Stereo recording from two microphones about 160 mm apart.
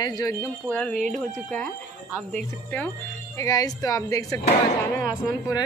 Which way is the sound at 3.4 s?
20° left (ahead or behind).